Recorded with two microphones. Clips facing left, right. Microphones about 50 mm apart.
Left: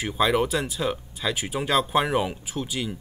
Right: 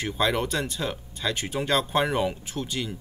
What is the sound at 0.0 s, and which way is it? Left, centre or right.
Speech, centre.